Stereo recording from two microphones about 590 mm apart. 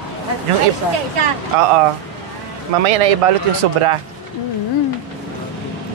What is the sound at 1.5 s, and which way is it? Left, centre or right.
Speech, right.